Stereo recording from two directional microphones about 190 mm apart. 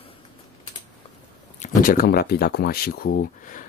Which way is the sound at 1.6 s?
50° left (ahead or behind).